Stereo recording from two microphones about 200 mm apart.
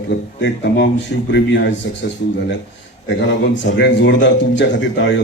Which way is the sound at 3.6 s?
65° left (ahead or behind).